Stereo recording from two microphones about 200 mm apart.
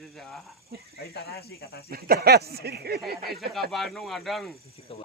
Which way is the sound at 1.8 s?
50° right (ahead or behind).